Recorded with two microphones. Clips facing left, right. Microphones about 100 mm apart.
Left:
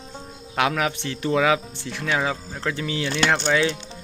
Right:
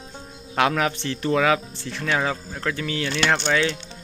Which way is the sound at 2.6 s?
20° left (ahead or behind).